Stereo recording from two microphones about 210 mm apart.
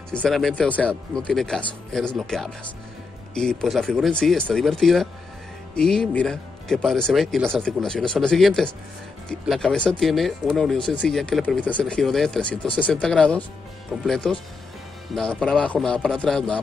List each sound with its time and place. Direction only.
0.1 s speech: 5° left (ahead or behind)